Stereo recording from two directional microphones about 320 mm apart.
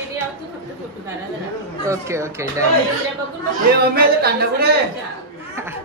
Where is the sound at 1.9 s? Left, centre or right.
Centre.